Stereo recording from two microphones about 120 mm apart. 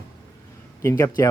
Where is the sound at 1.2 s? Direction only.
25° left (ahead or behind).